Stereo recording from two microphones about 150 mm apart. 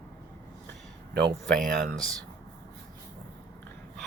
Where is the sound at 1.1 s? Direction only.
90° right.